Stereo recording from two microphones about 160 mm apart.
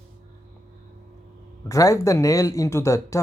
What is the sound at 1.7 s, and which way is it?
Speech, 20° left (ahead or behind).